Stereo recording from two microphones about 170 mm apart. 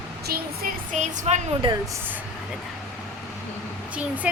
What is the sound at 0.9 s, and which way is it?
Speech, 45° right (ahead or behind).